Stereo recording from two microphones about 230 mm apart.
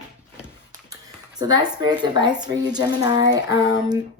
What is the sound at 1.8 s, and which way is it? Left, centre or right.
Speech, centre.